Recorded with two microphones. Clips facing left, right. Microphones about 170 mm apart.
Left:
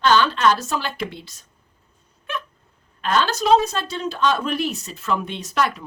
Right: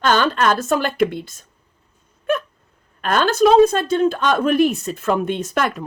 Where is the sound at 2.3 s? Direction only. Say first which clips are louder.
Right 11 dB; 50° right (ahead or behind).